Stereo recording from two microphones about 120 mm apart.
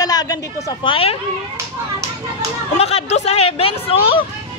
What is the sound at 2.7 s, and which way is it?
Speech, 60° left (ahead or behind).